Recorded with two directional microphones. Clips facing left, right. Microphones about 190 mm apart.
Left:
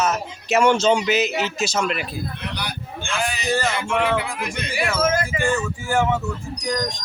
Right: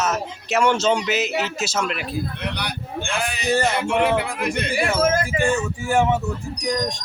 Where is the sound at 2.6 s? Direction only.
60° right (ahead or behind).